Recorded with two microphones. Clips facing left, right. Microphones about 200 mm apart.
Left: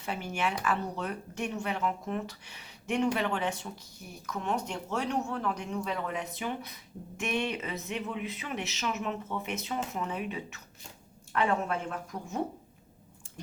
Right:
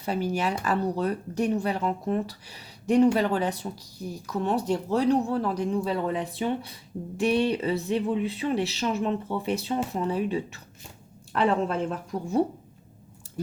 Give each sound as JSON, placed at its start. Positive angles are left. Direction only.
{"t": 0.0, "sound": "speech", "side_deg": -35}